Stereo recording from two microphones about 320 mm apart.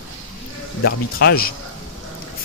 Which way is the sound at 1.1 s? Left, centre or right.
Left.